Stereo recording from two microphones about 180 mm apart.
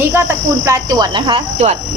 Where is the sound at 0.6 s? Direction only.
20° right (ahead or behind).